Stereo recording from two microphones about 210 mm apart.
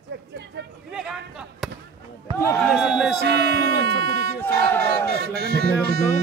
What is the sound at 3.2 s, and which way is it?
Speech, 50° right (ahead or behind).